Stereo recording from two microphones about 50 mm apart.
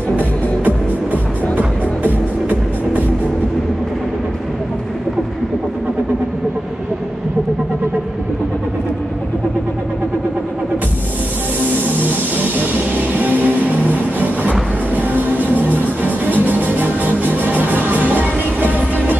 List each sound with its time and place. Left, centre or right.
0.2 s music: left
12.0 s music: right
15.0 s music: right